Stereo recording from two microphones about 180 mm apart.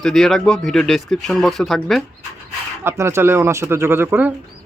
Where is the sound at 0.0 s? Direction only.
Centre (ahead or behind).